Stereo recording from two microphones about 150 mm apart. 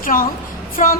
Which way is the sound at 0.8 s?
55° left (ahead or behind).